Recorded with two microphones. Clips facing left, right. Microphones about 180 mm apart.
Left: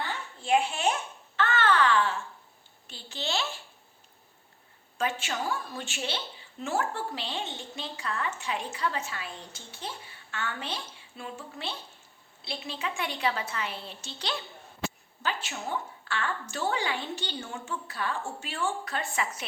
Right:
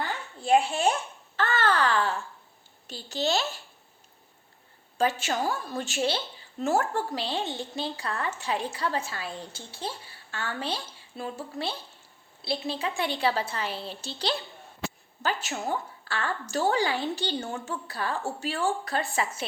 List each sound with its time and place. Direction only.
0.4 s a sound: 35° right (ahead or behind)
1.4 s babbling: 35° right (ahead or behind)
2.8 s a woman's voice: 40° right (ahead or behind)
4.9 s a woman's voice: 40° right (ahead or behind)